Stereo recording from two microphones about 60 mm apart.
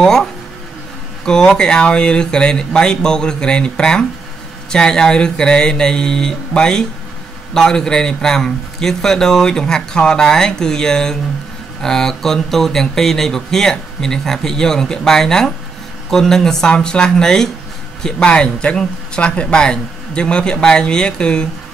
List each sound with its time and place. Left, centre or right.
0.0 s speech: centre